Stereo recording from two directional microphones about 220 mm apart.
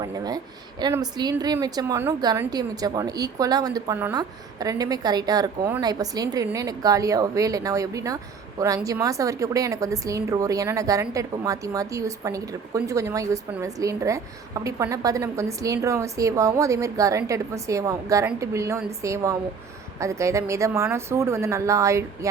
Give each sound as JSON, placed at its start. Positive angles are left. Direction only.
{"t": 0.0, "sound": "a woman's voice", "side_deg": -15}